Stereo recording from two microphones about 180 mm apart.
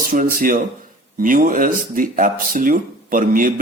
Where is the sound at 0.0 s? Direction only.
50° right (ahead or behind).